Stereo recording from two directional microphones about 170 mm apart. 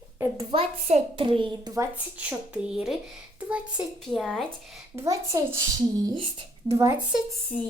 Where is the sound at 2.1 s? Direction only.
5° right (ahead or behind).